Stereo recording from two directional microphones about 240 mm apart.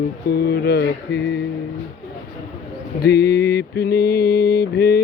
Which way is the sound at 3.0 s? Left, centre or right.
Left.